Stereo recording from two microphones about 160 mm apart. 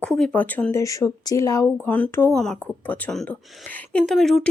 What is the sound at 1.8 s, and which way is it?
Speech, 10° left (ahead or behind).